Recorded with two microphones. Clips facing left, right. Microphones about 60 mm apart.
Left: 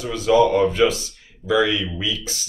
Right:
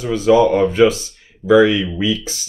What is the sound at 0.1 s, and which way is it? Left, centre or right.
Speech, right.